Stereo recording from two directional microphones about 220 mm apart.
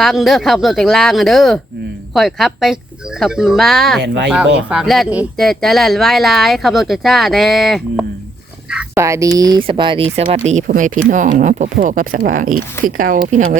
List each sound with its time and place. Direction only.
0.0 s speech: centre (ahead or behind)
4.0 s speech: 50° right (ahead or behind)
4.3 s speech: 5° right (ahead or behind); by 10.2 s 25° right (ahead or behind)
10.3 s speech: 35° right (ahead or behind)